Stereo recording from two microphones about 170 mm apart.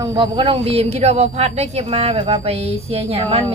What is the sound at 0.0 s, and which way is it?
A woman's voice, 30° right (ahead or behind).